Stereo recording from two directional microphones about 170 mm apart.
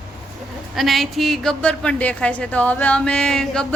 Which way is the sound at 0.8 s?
Centre (ahead or behind).